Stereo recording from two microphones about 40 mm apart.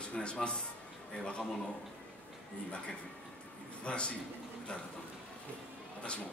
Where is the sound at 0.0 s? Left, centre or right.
Left.